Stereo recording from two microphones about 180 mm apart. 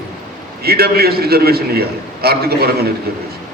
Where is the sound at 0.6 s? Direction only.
60° right (ahead or behind).